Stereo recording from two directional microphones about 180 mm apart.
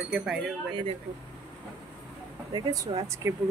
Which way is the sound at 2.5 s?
20° right (ahead or behind).